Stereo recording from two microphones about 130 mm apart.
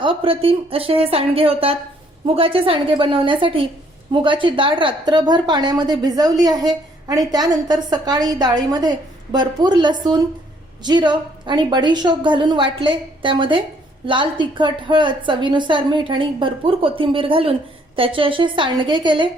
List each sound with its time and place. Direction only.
0.0 s a woman's voice: 45° right (ahead or behind)